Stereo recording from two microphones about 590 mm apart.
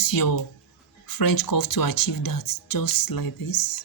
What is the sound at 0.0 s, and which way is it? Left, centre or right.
Speech, left.